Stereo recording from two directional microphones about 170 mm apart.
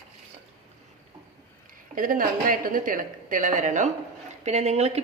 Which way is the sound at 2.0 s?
55° right (ahead or behind).